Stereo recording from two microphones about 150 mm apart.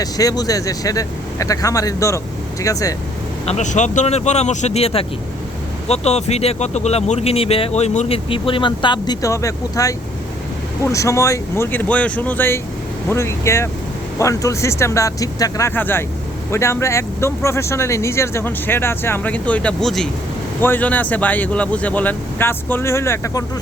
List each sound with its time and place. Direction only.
0.0 s speech: 25° left (ahead or behind)
3.4 s speech: 50° left (ahead or behind); by 20.1 s centre (ahead or behind)
20.6 s speech: 15° left (ahead or behind)